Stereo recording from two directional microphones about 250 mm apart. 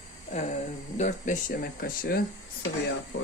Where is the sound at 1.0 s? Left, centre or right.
Left.